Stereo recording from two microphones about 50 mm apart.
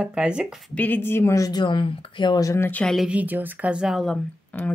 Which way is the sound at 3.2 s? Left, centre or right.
Right.